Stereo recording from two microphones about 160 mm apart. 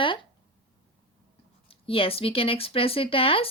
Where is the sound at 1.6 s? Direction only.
35° left (ahead or behind).